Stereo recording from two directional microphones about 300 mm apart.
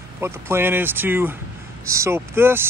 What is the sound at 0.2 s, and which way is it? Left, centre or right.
Speech, centre.